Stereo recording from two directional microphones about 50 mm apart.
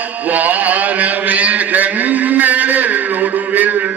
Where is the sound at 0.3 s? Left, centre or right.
Right.